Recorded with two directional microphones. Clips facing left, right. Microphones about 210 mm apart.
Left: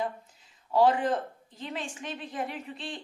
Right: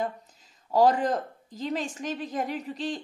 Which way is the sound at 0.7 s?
40° right (ahead or behind).